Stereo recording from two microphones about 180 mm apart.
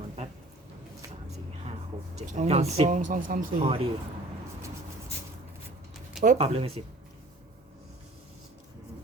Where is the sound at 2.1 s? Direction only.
40° right (ahead or behind).